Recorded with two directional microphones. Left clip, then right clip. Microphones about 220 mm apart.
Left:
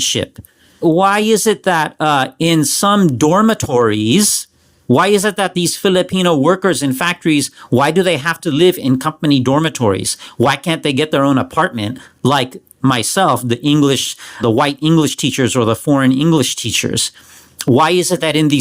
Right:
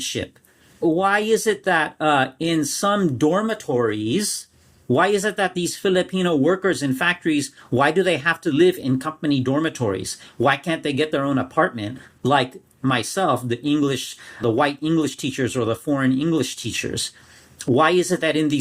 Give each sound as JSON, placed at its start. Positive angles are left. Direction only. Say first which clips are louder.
{"t": 0.0, "sound": "speech", "louder": "left 10 dB", "side_deg": 35}